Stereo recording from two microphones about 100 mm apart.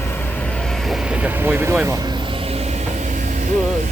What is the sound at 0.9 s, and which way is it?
Vehicle, 10° right (ahead or behind).